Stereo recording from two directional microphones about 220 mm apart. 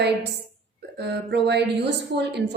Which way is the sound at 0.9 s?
50° right (ahead or behind).